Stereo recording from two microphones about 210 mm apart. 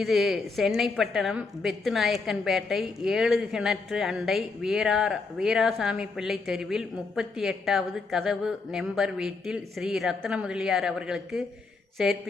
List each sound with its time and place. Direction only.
0.0 s a woman's voice: centre (ahead or behind)